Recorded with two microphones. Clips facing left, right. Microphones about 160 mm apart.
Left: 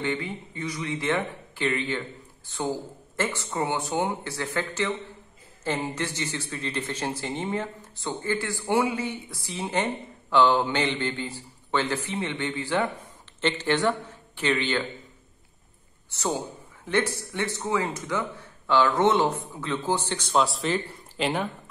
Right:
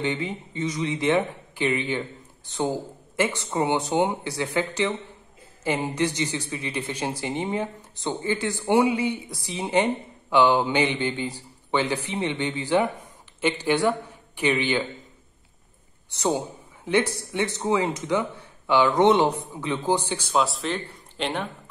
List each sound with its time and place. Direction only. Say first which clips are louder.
0.0 s a man's voice: right 2 dB; 20° right (ahead or behind)
16.1 s a man's voice: right 4 dB; 15° right (ahead or behind); by 21.5 s 5° left (ahead or behind)